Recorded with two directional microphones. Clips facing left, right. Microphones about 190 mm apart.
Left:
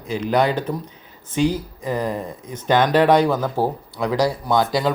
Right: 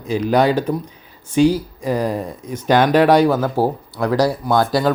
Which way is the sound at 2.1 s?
10° right (ahead or behind).